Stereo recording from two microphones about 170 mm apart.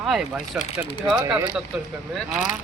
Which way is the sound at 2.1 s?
Centre (ahead or behind).